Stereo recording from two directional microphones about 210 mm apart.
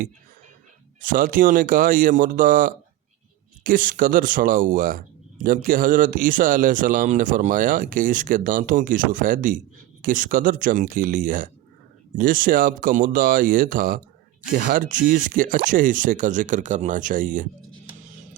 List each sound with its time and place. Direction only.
1.0 s speech: 40° right (ahead or behind)